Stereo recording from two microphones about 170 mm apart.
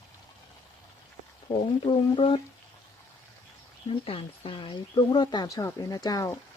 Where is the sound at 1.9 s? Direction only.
30° left (ahead or behind).